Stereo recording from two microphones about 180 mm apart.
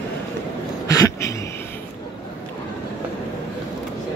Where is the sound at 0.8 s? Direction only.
20° left (ahead or behind).